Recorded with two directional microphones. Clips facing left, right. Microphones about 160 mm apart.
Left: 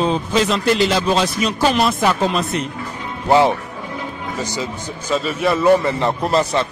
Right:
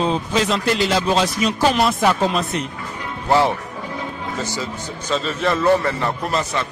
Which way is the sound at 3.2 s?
20° left (ahead or behind).